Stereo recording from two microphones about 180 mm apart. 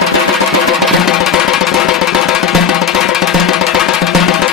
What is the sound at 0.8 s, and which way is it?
Music, centre (ahead or behind).